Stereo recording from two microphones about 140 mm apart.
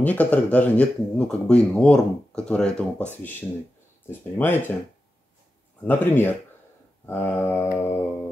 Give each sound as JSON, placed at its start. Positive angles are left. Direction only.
{"t": 0.0, "sound": "speech", "side_deg": 10}
{"t": 4.4, "sound": "speech", "side_deg": 15}
{"t": 5.9, "sound": "speech", "side_deg": 15}